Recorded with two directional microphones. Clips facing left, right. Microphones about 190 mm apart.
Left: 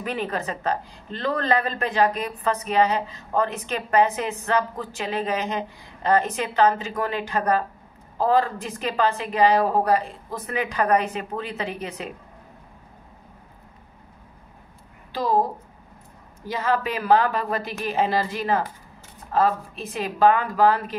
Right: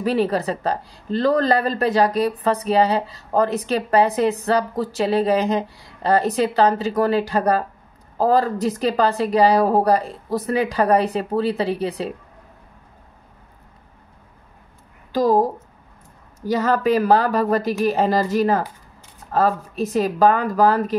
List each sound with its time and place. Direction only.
0.0 s speech: 35° right (ahead or behind)
15.1 s a woman's voice: 45° right (ahead or behind)